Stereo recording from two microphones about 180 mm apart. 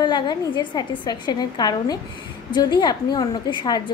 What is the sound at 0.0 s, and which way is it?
A woman's voice, 25° left (ahead or behind).